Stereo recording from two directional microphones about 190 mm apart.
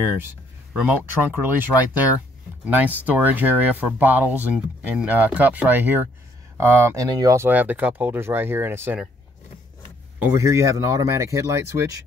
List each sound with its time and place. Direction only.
0.7 s speech: 10° right (ahead or behind)
10.1 s speech: 10° right (ahead or behind)